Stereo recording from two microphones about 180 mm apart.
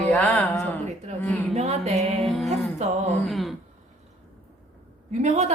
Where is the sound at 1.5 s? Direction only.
35° right (ahead or behind).